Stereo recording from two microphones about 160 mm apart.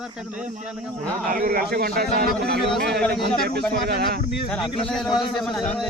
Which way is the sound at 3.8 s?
75° right (ahead or behind).